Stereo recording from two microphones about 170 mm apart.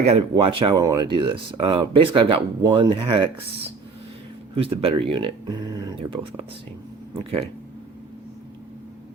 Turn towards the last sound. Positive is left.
turn(degrees=-35)  # may be behind; listen again after turning